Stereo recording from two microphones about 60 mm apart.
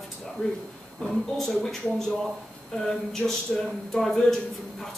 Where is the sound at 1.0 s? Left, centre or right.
Centre.